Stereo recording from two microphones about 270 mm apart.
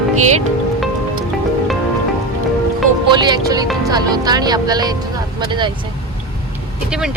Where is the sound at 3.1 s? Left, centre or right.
Centre.